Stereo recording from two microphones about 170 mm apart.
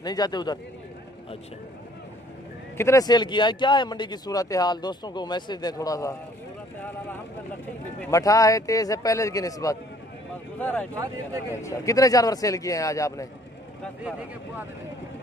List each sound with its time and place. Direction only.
0.0 s speech: 25° left (ahead or behind)
2.8 s speech: 20° left (ahead or behind)
8.1 s speech: 20° left (ahead or behind)
10.6 s speech: 10° left (ahead or behind)